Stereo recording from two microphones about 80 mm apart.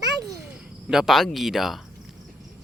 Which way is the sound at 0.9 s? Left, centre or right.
Centre.